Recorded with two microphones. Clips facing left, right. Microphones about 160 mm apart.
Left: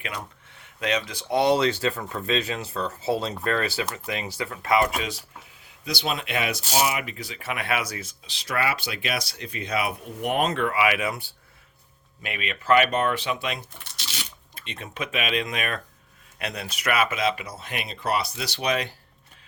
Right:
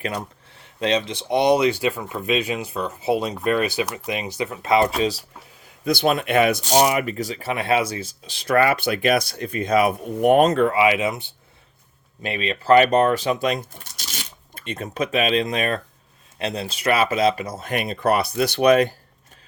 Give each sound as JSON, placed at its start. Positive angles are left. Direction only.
{"t": 0.0, "sound": "speech", "side_deg": -40}
{"t": 5.8, "sound": "speech", "side_deg": -55}
{"t": 8.3, "sound": "speech", "side_deg": -50}
{"t": 10.7, "sound": "speech", "side_deg": -25}
{"t": 12.2, "sound": "speech", "side_deg": -30}